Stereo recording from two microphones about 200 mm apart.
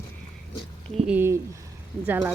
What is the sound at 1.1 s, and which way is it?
Speech, 10° right (ahead or behind).